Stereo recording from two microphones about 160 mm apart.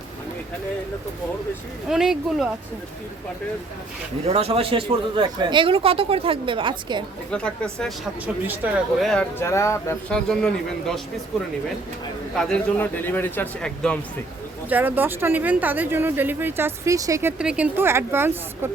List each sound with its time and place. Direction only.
1.9 s speech: 5° right (ahead or behind)
4.3 s speech: 40° right (ahead or behind)
7.3 s speech: 5° left (ahead or behind)
9.0 s speech: 5° left (ahead or behind)
9.4 s speech: 15° left (ahead or behind)
10.1 s speech: 5° left (ahead or behind)
12.4 s speech: 5° left (ahead or behind)
14.7 s speech: 10° right (ahead or behind)
17.3 s speech: 5° right (ahead or behind)